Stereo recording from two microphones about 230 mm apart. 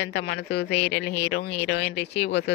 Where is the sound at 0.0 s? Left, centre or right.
Left.